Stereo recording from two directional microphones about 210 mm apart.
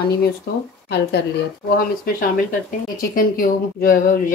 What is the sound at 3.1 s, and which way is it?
Speech, 45° left (ahead or behind).